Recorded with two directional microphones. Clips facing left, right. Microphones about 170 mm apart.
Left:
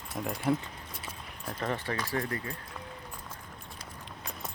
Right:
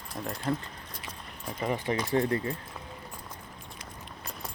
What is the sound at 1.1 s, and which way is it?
Keys jangling, 5° left (ahead or behind).